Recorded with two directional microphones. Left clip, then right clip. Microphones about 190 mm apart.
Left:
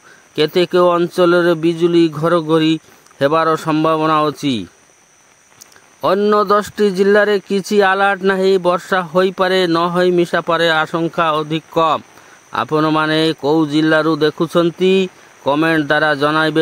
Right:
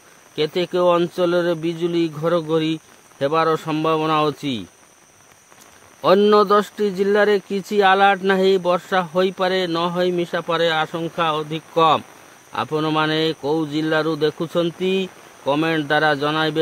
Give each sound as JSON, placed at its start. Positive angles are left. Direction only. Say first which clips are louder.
{"t": 0.4, "sound": "speech", "louder": "left 7 dB", "side_deg": 35}
{"t": 5.9, "sound": "speech", "louder": "left 1 dB", "side_deg": 35}